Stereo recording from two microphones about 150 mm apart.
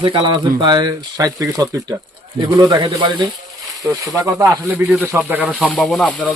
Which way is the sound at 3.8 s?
20° right (ahead or behind).